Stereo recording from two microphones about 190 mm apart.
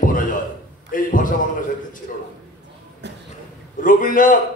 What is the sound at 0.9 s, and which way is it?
Speech, 45° left (ahead or behind).